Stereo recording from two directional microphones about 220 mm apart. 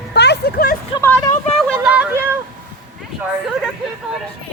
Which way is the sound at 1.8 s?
5° right (ahead or behind).